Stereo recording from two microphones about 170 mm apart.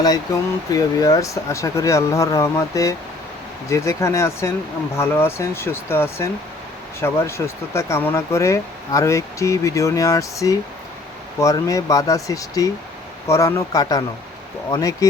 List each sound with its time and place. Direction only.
0.7 s speech: 20° left (ahead or behind)